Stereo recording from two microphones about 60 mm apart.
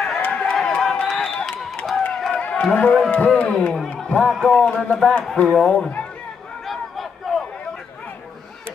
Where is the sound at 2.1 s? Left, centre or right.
Centre.